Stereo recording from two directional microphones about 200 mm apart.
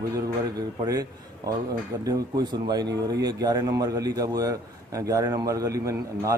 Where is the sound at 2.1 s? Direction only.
20° right (ahead or behind).